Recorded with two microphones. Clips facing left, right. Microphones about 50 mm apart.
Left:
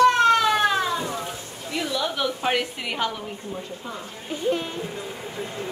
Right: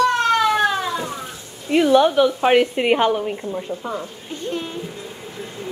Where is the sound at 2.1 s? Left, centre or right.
Centre.